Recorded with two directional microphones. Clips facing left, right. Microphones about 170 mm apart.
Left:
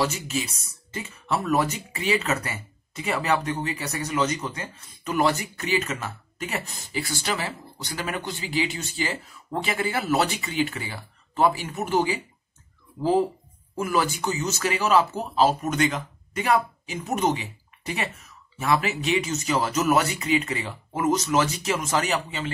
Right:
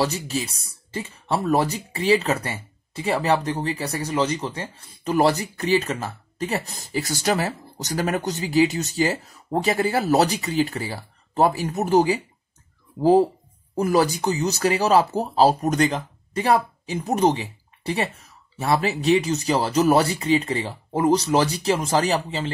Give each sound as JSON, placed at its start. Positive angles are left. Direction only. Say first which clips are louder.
{"t": 0.0, "sound": "speech", "louder": "right 2 dB", "side_deg": -35}